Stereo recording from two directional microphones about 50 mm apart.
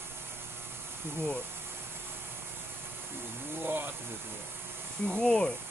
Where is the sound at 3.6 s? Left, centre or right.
Right.